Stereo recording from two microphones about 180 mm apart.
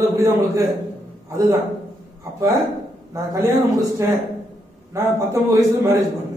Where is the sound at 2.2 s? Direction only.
20° right (ahead or behind).